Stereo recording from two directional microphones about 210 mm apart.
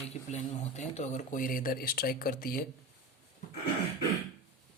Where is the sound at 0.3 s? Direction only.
35° left (ahead or behind).